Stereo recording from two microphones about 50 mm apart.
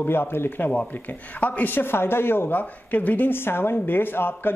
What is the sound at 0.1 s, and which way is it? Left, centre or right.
Speech, left.